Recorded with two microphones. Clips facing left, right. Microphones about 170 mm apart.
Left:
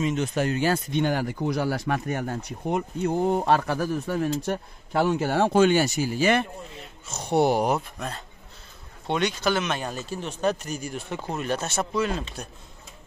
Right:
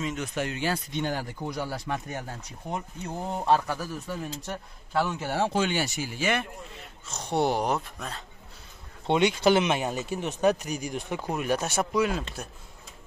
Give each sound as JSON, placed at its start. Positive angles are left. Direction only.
{"t": 0.0, "sound": "speech", "side_deg": 30}
{"t": 0.9, "sound": "speech", "side_deg": 70}
{"t": 7.1, "sound": "speech", "side_deg": 10}
{"t": 9.1, "sound": "speech", "side_deg": -25}